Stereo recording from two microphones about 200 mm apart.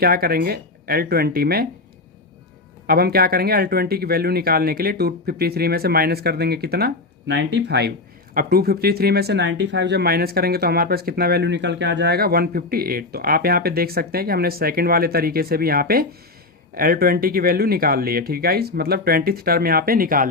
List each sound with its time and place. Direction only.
0.0 s speech: 50° right (ahead or behind)
2.8 s speech: 50° right (ahead or behind)